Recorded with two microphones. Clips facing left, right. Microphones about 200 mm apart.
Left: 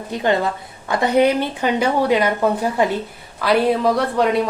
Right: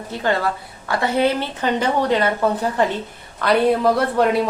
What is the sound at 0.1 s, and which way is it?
A woman's voice, 20° left (ahead or behind).